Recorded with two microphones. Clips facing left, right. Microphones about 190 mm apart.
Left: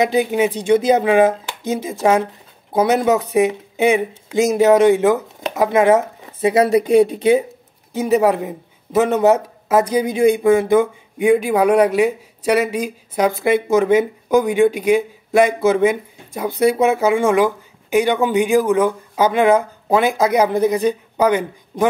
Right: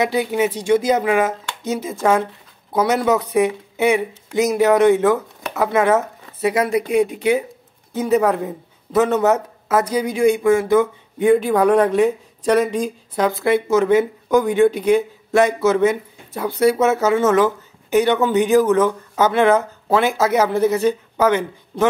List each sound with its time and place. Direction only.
0.0 s speech: 20° left (ahead or behind)
0.9 s speech: 30° left (ahead or behind)
1.4 s speech: 15° left (ahead or behind)
6.4 s speech: 35° left (ahead or behind)
7.9 s speech: 15° left (ahead or behind)